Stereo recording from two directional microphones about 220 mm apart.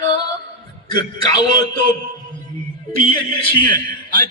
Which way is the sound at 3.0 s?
20° left (ahead or behind).